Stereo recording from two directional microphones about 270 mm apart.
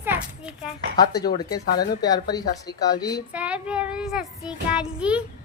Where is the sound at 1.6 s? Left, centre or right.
Left.